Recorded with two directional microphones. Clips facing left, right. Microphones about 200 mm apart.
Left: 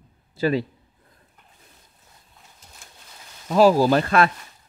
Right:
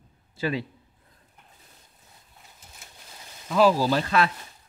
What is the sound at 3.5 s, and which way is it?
Speech, 40° left (ahead or behind).